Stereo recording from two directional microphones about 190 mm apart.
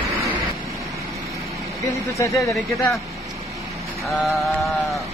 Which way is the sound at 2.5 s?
Centre (ahead or behind).